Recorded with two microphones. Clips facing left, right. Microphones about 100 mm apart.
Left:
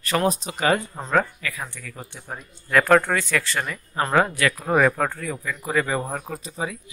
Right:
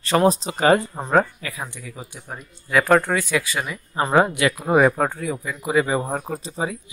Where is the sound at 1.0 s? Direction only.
25° right (ahead or behind).